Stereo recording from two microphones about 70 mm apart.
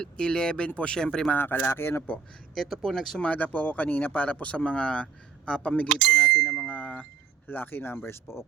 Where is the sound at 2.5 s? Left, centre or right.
Centre.